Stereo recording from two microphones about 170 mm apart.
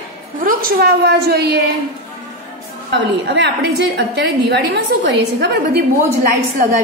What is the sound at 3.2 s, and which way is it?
A woman's voice, 85° right.